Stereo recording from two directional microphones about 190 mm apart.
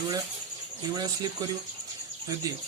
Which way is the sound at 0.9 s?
20° right (ahead or behind).